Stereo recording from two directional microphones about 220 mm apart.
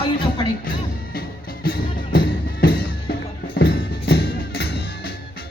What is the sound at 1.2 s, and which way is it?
Music, 45° left (ahead or behind).